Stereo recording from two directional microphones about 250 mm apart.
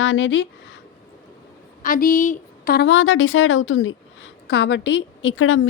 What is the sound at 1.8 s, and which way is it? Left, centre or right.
A woman's voice, left.